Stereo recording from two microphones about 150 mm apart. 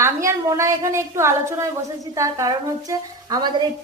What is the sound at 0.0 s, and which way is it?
A woman's voice, 20° right (ahead or behind).